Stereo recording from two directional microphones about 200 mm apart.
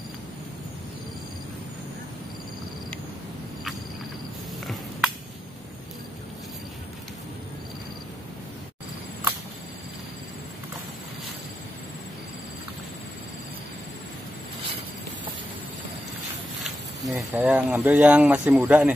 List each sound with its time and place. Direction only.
16.6 s speech: 5° right (ahead or behind)